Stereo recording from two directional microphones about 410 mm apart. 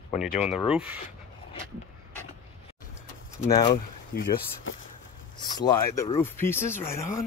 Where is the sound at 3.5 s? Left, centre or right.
Centre.